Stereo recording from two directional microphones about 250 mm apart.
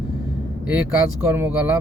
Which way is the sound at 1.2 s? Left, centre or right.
Centre.